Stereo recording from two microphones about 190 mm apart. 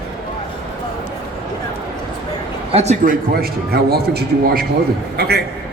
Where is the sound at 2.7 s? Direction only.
35° right (ahead or behind).